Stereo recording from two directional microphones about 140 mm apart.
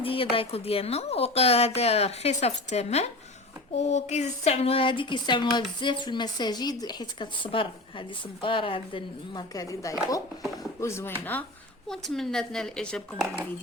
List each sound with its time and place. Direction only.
0.0 s speech: 40° left (ahead or behind)
9.6 s speech: 25° left (ahead or behind)
11.9 s a woman's voice: 5° left (ahead or behind)